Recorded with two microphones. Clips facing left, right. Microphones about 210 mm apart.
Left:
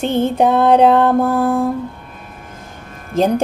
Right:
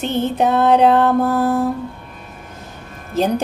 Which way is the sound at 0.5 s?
10° left (ahead or behind).